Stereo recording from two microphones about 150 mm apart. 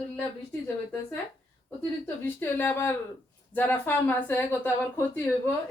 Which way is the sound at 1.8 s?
15° left (ahead or behind).